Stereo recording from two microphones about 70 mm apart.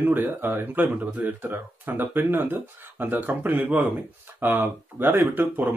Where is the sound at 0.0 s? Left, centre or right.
Right.